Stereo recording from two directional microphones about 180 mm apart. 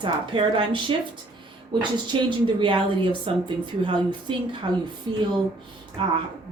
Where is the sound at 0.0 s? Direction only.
30° right (ahead or behind).